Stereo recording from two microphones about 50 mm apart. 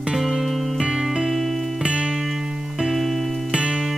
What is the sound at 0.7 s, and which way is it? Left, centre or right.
Music, centre.